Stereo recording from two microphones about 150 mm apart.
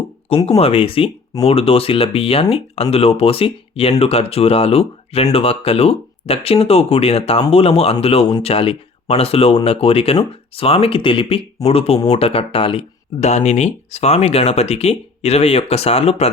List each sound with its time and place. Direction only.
0.4 s speech: 45° left (ahead or behind)